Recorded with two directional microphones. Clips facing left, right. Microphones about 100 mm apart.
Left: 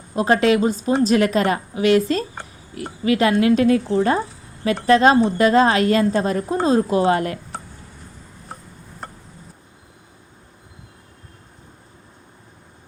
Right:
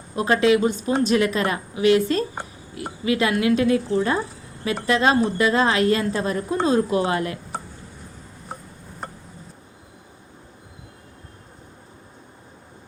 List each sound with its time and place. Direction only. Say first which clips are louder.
0.4 s a woman's voice: left 1 dB; 35° left (ahead or behind)
2.3 s oink: right 1 dB; 15° right (ahead or behind)
3.0 s a woman's voice: left 4 dB; 35° left (ahead or behind)
9.0 s a sound: right 1 dB; centre (ahead or behind)